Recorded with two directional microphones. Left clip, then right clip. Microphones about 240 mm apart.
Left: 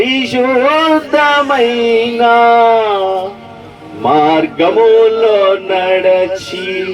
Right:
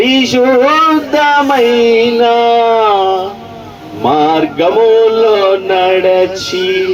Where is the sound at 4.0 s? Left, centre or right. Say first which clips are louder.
Even; right.